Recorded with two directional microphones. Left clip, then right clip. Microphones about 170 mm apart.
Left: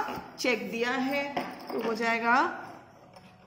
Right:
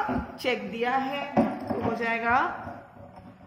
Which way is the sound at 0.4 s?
35° left (ahead or behind).